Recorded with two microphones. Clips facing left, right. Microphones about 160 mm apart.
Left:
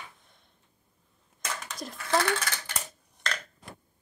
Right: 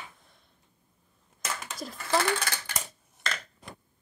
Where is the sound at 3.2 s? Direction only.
5° right (ahead or behind).